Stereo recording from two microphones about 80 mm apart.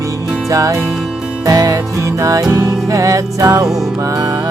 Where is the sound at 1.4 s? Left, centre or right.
Right.